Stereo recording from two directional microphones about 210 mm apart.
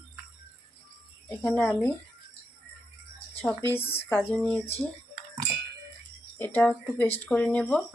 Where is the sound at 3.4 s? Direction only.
10° left (ahead or behind).